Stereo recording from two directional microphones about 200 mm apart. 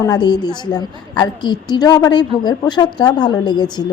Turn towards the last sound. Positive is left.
turn(degrees=20)  # may be behind; listen again after turning